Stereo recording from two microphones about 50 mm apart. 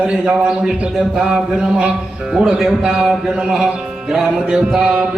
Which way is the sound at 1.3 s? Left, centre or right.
Centre.